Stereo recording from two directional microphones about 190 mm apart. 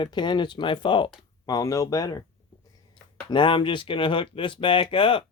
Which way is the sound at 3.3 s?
25° left (ahead or behind).